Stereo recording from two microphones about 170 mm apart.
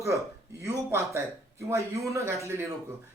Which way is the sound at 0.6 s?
15° right (ahead or behind).